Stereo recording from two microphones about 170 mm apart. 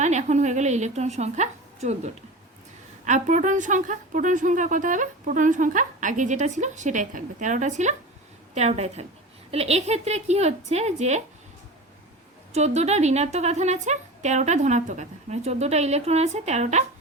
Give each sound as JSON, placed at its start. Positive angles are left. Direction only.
{"t": 0.0, "sound": "a woman's voice", "side_deg": -45}
{"t": 3.0, "sound": "a woman's voice", "side_deg": -45}
{"t": 12.5, "sound": "a woman's voice", "side_deg": -40}